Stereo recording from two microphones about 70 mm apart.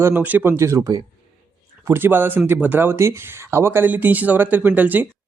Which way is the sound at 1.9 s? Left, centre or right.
Right.